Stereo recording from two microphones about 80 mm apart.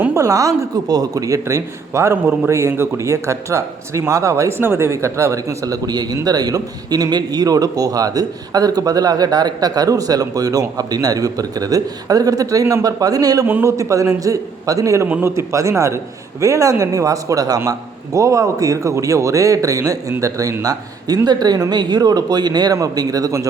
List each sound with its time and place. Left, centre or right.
0.2 s a man's voice: right